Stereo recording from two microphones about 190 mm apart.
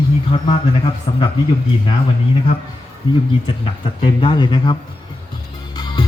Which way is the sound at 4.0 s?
25° left (ahead or behind).